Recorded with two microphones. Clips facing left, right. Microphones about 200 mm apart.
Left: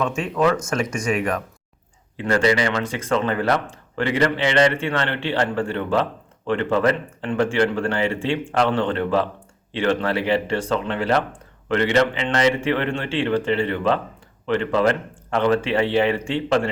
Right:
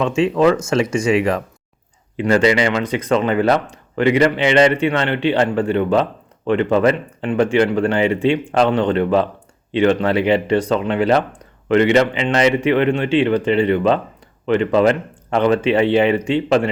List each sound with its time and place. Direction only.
0.2 s speech: 25° right (ahead or behind)